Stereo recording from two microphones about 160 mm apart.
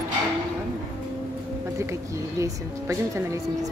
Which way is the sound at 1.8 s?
20° right (ahead or behind).